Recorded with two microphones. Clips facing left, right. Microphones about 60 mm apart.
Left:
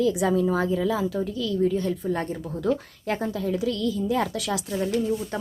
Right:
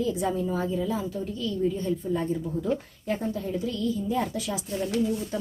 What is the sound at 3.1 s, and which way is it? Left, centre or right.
A woman's voice, left.